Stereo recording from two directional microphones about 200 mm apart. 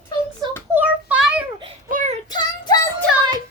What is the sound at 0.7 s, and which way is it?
Child singing, 10° right (ahead or behind).